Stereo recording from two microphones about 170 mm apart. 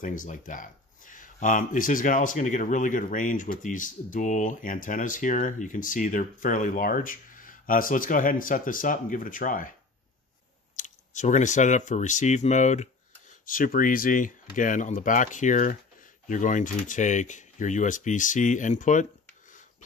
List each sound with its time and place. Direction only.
0.0 s speech: 50° left (ahead or behind)
10.8 s speech: 45° left (ahead or behind)